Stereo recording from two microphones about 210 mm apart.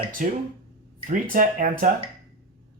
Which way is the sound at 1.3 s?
40° right (ahead or behind).